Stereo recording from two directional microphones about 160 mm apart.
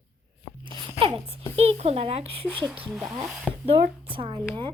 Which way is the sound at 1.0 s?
40° right (ahead or behind).